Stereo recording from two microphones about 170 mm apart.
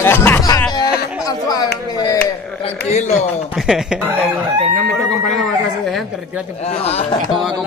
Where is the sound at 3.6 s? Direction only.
5° right (ahead or behind).